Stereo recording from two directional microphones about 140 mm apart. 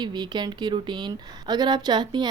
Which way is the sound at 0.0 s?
30° right (ahead or behind).